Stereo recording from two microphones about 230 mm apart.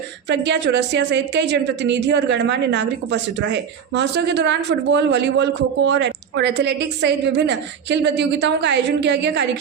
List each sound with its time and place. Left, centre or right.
0.3 s a woman's voice: right